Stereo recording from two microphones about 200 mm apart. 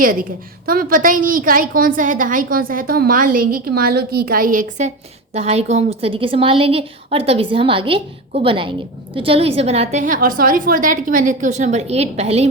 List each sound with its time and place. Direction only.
0.0 s a woman's voice: 45° right (ahead or behind)
5.3 s a woman's voice: 30° right (ahead or behind)